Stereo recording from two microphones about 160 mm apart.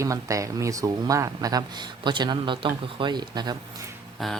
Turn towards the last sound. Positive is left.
turn(degrees=0)  # may be behind; listen again after turning